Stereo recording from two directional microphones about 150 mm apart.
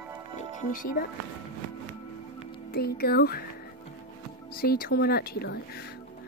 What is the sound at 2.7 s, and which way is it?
Speech, 90° left.